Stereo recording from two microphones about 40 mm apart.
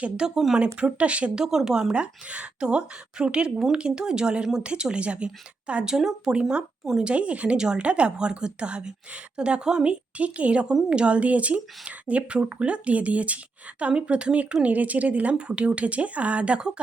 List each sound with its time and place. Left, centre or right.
0.2 s speech: centre
0.6 s speech: right
1.4 s speech: centre
1.9 s a woman's voice: right
5.8 s speech: centre
7.0 s a woman's voice: right
14.6 s speech: right